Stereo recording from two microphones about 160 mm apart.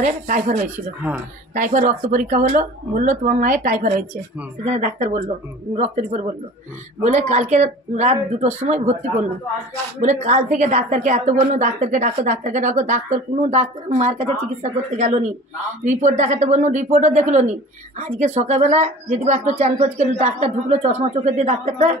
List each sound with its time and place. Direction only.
0.0 s a woman's voice: 50° right (ahead or behind)
10.0 s a woman's voice: 50° right (ahead or behind)